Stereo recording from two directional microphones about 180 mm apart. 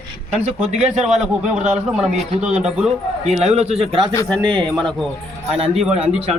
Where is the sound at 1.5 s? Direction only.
40° right (ahead or behind).